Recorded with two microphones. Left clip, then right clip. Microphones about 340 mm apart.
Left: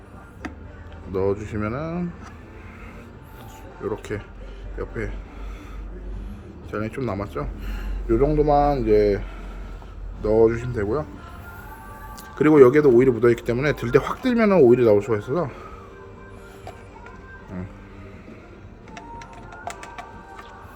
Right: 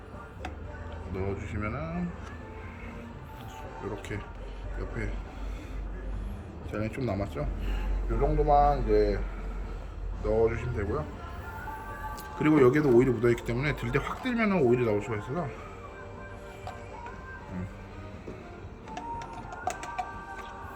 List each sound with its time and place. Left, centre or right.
1.1 s speech: centre
4.1 s speech: centre
6.7 s speech: centre
8.2 s speech: left
10.2 s speech: centre
12.1 s speech: centre